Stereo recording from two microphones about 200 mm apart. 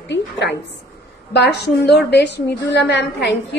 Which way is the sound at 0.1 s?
60° left (ahead or behind).